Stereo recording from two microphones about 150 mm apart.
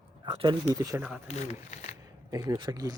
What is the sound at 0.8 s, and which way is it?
Speech, 20° right (ahead or behind).